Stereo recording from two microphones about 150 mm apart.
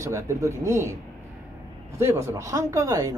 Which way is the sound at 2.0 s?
20° right (ahead or behind).